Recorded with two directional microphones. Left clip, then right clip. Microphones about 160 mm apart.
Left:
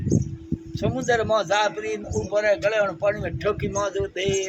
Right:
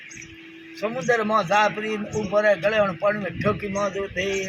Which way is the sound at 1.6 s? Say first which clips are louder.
Right 2 dB; 50° left (ahead or behind).